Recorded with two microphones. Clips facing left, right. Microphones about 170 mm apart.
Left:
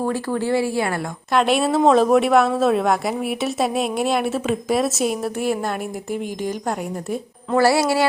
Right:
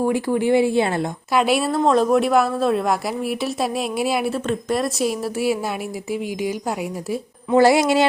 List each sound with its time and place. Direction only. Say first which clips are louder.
0.0 s speech: right 3 dB; 15° right (ahead or behind)
1.3 s speech: left 1 dB; 5° right (ahead or behind)
7.5 s speech: right 2 dB; 20° right (ahead or behind)